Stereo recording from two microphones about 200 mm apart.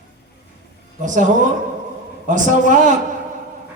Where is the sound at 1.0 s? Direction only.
40° right (ahead or behind).